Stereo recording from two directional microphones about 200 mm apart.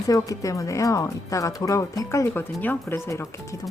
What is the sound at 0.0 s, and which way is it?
Speech, 15° left (ahead or behind).